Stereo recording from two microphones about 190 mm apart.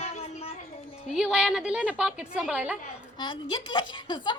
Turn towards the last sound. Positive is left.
turn(degrees=25)  # may be behind; listen again after turning